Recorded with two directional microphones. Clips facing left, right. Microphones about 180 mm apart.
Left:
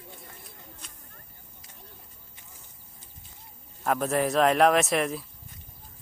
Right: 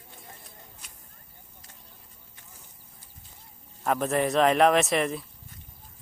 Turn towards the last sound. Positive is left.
turn(degrees=0)  # may be behind; listen again after turning